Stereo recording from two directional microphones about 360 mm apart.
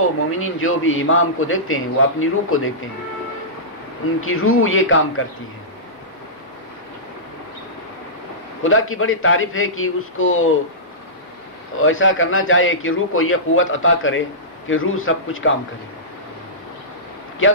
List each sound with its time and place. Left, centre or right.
0.3 s a man's voice: left
4.2 s a man's voice: left
8.6 s a man's voice: left
11.7 s a man's voice: left